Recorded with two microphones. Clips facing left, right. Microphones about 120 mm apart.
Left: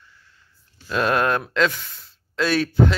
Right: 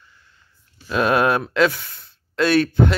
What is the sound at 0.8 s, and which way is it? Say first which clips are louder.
Speech: right 3 dB; 5° right (ahead or behind).